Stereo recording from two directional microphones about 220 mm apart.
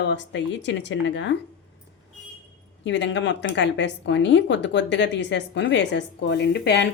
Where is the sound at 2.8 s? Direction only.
55° left (ahead or behind).